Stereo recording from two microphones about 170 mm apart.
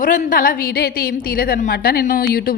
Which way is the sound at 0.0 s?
55° left (ahead or behind).